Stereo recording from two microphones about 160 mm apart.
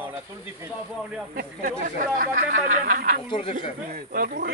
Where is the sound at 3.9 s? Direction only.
65° right (ahead or behind).